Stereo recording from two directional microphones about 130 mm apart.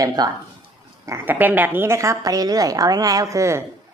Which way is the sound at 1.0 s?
20° right (ahead or behind).